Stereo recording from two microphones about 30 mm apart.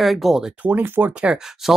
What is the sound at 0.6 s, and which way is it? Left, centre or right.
Speech, right.